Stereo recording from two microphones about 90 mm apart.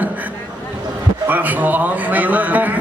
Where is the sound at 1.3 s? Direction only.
20° right (ahead or behind).